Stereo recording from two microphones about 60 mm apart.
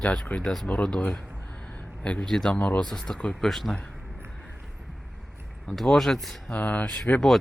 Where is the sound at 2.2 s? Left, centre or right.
Centre.